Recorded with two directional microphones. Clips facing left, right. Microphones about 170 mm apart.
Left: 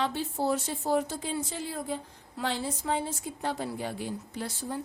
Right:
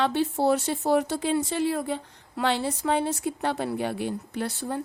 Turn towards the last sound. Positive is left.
turn(degrees=-65)  # may be behind; listen again after turning